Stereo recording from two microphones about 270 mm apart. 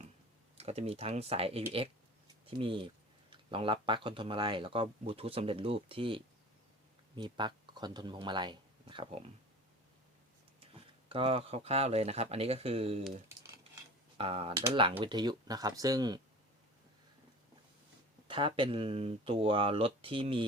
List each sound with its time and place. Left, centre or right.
0.5 s speech: right
10.6 s speech: centre
13.1 s speech: centre
14.2 s speech: right
18.3 s speech: centre